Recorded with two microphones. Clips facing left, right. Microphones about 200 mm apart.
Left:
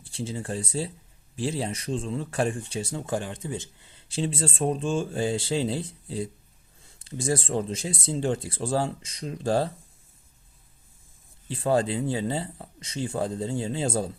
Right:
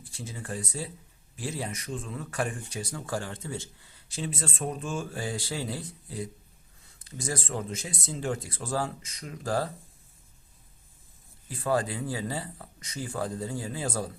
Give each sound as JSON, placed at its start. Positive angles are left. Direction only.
{"t": 0.0, "sound": "speech", "side_deg": 30}
{"t": 11.4, "sound": "speech", "side_deg": 30}